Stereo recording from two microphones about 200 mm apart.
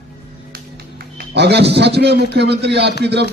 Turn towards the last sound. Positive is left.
turn(degrees=-55)  # may be behind; listen again after turning